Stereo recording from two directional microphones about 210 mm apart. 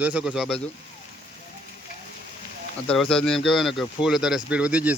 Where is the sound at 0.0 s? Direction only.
5° right (ahead or behind).